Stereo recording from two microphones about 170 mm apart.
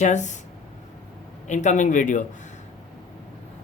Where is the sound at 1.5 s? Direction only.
45° left (ahead or behind).